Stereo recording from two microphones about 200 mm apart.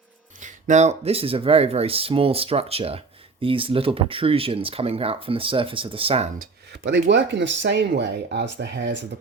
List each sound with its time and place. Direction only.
0.3 s speech: 40° right (ahead or behind)
6.4 s speech: 60° right (ahead or behind)